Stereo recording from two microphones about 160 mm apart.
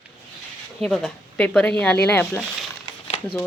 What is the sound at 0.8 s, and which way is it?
Speech, 5° left (ahead or behind).